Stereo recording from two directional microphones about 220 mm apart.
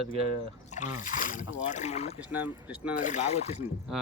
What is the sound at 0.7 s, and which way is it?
Speech, 35° left (ahead or behind).